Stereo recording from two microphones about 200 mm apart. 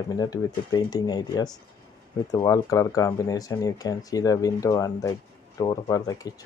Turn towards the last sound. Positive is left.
turn(degrees=20)  # may be behind; listen again after turning